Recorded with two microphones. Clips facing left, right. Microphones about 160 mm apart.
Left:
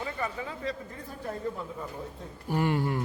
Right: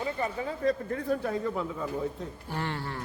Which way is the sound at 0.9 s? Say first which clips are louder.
Right 8 dB; 80° right.